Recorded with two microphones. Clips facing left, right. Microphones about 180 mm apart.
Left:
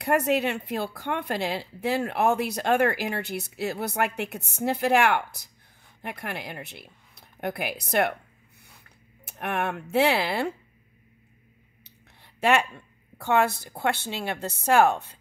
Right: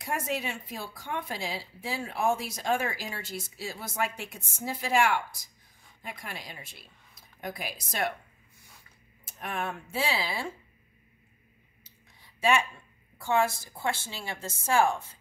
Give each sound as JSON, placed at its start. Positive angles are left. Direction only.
{"t": 0.0, "sound": "a woman's voice", "side_deg": 65}
{"t": 11.8, "sound": "clicking", "side_deg": 65}
{"t": 13.2, "sound": "a woman's voice", "side_deg": 65}